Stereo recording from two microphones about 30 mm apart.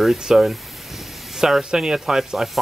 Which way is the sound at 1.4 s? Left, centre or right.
Right.